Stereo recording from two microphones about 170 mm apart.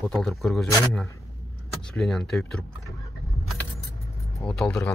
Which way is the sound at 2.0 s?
5° left (ahead or behind).